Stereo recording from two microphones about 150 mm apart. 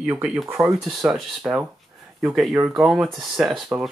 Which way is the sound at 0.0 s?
10° right (ahead or behind).